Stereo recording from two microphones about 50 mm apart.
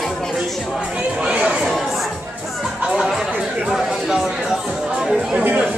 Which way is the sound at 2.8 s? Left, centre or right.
Centre.